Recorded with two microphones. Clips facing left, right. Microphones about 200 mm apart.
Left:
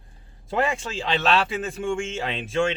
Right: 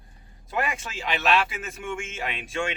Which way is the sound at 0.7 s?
30° left (ahead or behind).